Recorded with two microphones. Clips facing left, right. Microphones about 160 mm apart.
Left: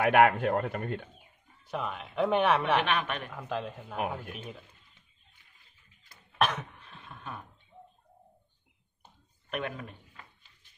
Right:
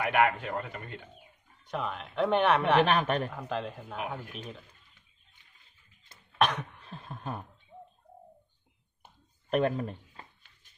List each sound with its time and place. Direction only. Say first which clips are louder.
0.0 s a man's voice: left 4 dB; 60° left (ahead or behind)
1.6 s speech: right 1 dB; 5° left (ahead or behind)
2.8 s speech: right 5 dB; 40° right (ahead or behind)
3.3 s speech: right 1 dB; centre (ahead or behind)
6.3 s throat clearing: right 1 dB; centre (ahead or behind)
6.9 s a sound: right 5 dB; 40° right (ahead or behind)
9.5 s a man's voice: right 8 dB; 35° right (ahead or behind)